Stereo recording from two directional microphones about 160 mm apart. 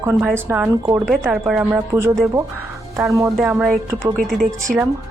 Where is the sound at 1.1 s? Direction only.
Centre (ahead or behind).